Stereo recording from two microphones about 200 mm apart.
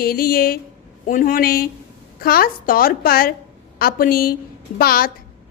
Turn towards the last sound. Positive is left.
turn(degrees=50)  # may be behind; listen again after turning